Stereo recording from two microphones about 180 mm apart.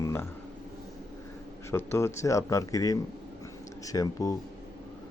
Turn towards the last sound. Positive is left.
turn(degrees=20)  # may be behind; listen again after turning